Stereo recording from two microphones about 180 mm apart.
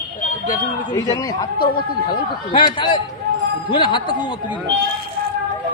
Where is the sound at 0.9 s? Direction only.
20° left (ahead or behind).